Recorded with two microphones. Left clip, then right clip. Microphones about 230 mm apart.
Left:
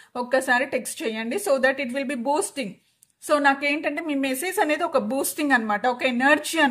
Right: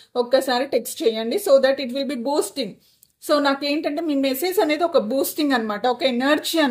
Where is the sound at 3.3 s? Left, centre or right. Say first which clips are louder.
Right 1 dB; left.